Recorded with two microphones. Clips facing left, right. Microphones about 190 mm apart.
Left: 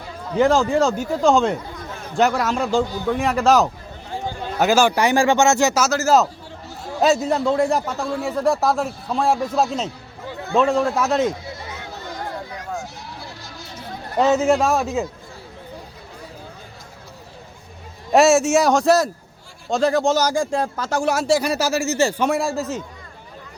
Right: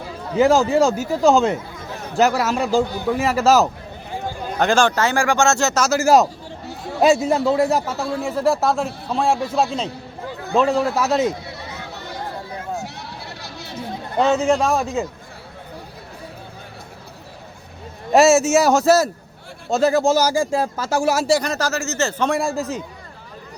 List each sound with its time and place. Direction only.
0.3 s speech: 5° right (ahead or behind)
4.5 s speech: 5° left (ahead or behind)
6.0 s speech: 15° right (ahead or behind)
12.8 s a sound: 65° right (ahead or behind)
14.2 s speech: 5° left (ahead or behind)
18.1 s speech: centre (ahead or behind)